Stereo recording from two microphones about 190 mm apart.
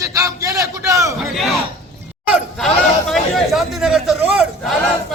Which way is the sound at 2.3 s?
Centre (ahead or behind).